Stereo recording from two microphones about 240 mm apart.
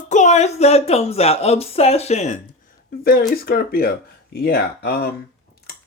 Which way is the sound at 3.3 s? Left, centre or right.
Left.